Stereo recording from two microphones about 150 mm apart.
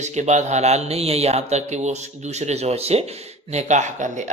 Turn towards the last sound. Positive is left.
turn(degrees=-55)  # may be behind; listen again after turning